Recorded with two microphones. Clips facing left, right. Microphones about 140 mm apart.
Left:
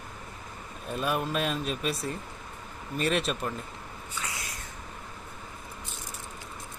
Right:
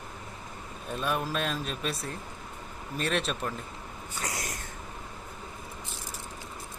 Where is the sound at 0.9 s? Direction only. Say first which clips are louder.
Left 1 dB; 5° left (ahead or behind).